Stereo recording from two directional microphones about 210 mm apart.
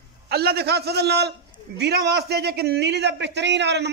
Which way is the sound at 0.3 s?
50° right (ahead or behind).